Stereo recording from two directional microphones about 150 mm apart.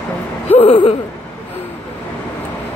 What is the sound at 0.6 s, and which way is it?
Speech, 40° left (ahead or behind).